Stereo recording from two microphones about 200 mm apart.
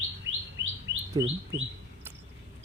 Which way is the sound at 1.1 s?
25° right (ahead or behind).